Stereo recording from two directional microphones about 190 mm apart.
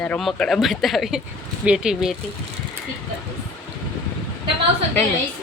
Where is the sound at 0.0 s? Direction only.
5° left (ahead or behind).